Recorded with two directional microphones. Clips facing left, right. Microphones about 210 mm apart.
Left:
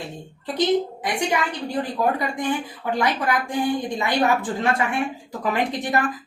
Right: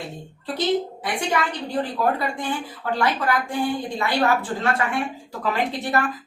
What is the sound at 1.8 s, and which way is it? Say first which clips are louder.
Speech: even; 15° left (ahead or behind).